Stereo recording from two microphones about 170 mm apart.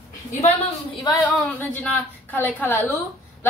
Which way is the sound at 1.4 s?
10° left (ahead or behind).